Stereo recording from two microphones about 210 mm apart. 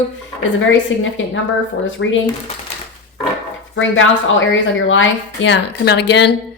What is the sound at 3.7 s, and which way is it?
A woman's voice, 65° left (ahead or behind).